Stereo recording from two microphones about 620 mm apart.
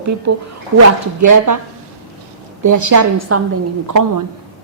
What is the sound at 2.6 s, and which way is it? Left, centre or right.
A woman's voice, right.